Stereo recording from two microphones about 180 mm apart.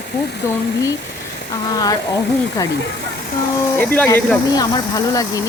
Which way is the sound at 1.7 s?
20° left (ahead or behind).